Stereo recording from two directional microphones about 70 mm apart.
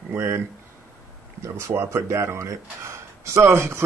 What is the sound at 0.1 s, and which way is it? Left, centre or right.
Speech, right.